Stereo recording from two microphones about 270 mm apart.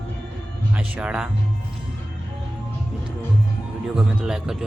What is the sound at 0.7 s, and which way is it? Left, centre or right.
Speech, centre.